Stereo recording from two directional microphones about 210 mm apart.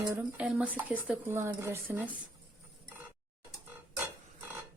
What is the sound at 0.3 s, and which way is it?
Speech, 5° right (ahead or behind).